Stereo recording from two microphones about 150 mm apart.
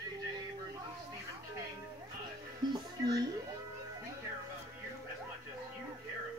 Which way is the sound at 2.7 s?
25° right (ahead or behind).